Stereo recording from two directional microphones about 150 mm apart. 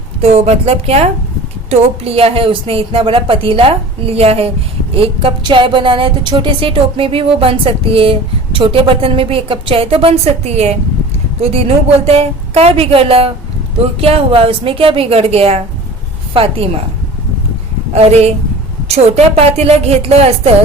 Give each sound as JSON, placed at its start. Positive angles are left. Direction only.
{"t": 0.2, "sound": "a woman's voice", "side_deg": -45}
{"t": 17.9, "sound": "a woman's voice", "side_deg": -45}